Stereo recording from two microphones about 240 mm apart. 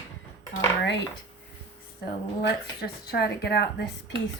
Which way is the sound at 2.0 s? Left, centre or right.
Left.